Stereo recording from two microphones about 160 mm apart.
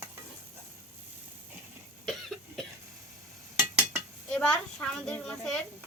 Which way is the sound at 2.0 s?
Centre (ahead or behind).